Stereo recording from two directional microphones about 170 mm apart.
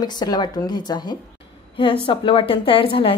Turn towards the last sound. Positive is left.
turn(degrees=30)  # may be behind; listen again after turning